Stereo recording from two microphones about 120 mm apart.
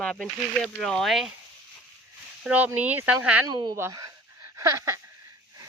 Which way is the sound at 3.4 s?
35° right (ahead or behind).